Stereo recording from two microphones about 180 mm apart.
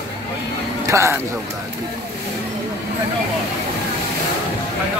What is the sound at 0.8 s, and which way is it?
Speech, 15° right (ahead or behind).